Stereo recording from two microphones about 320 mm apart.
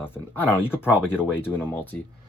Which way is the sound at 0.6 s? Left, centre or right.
Centre.